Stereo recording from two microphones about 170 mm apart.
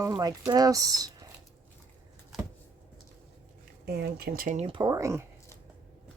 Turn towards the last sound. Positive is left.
turn(degrees=-15)  # may be behind; listen again after turning